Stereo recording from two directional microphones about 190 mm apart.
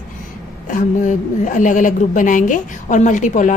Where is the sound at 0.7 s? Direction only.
40° left (ahead or behind).